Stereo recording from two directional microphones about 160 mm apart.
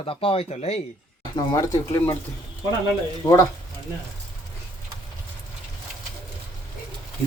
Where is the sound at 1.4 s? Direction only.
20° left (ahead or behind).